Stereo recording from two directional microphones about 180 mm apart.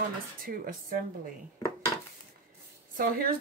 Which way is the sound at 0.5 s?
50° right (ahead or behind).